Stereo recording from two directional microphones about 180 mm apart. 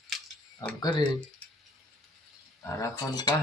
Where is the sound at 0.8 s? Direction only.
25° left (ahead or behind).